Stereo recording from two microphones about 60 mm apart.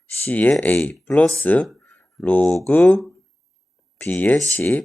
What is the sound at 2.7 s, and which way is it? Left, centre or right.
Speech, left.